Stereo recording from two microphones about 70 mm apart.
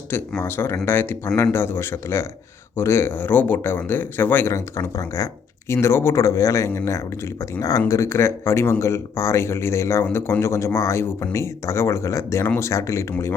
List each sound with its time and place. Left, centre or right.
0.4 s speech: left
4.4 s speech: left
5.7 s speech: left